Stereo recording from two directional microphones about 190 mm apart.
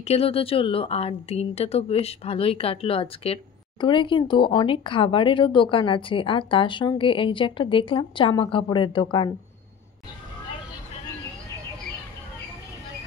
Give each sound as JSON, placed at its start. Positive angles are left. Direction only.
{"t": 0.0, "sound": "a woman's voice", "side_deg": 30}